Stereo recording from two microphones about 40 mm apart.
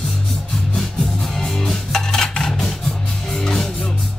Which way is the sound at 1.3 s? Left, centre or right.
Centre.